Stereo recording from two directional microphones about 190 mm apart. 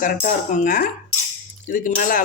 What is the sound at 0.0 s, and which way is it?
Speech, 45° left (ahead or behind).